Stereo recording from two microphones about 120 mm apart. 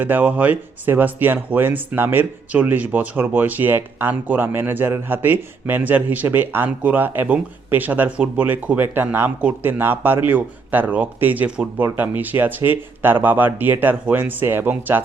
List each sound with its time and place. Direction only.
0.0 s speech: 15° right (ahead or behind)